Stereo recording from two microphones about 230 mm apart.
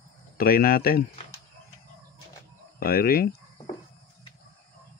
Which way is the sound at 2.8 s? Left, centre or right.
Left.